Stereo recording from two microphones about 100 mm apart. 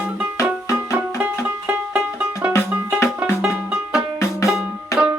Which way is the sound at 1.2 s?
15° right (ahead or behind).